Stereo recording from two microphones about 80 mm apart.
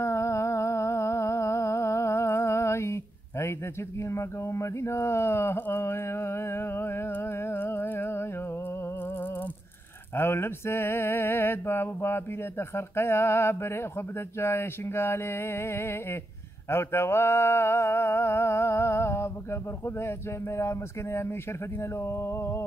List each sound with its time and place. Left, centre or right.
0.0 s humming: left
4.0 s a sound: left
10.1 s mantra: left